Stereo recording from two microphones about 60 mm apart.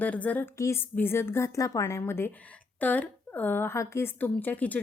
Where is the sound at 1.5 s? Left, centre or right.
Left.